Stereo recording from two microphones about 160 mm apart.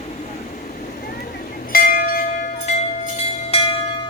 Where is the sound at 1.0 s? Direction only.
65° left (ahead or behind); by 3.8 s 35° left (ahead or behind).